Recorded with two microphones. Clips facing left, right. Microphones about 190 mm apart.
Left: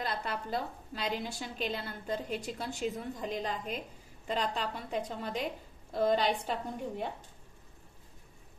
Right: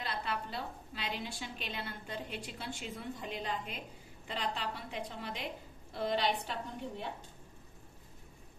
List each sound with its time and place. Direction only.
0.0 s a woman's voice: 45° left (ahead or behind)